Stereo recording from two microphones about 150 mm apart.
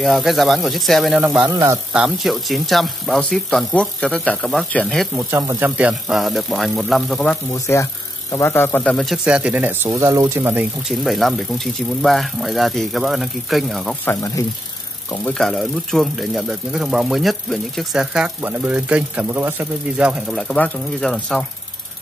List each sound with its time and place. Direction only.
0.0 s speech: centre (ahead or behind)
1.5 s speech: 20° right (ahead or behind)
1.9 s speech: 5° right (ahead or behind)
5.3 s speech: 15° right (ahead or behind); by 7.3 s 5° left (ahead or behind)
7.5 s a man's voice: 20° left (ahead or behind)
8.8 s speech: centre (ahead or behind); by 10.7 s 15° right (ahead or behind)
10.9 s speech: centre (ahead or behind)
14.0 s a man's voice: 20° left (ahead or behind)
15.2 s speech: 5° left (ahead or behind)